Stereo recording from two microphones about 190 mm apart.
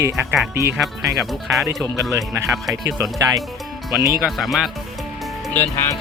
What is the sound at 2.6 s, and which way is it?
Speech, 20° right (ahead or behind).